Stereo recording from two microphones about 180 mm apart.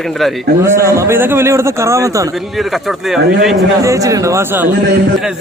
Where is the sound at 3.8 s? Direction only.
20° right (ahead or behind).